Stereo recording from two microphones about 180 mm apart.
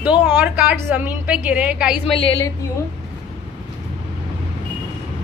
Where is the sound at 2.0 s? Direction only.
30° left (ahead or behind).